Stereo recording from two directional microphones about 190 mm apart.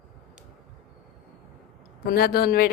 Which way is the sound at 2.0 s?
50° left (ahead or behind).